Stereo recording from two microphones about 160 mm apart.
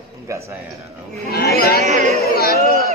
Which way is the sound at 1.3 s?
75° left (ahead or behind).